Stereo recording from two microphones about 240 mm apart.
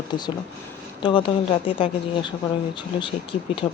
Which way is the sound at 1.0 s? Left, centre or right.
Left.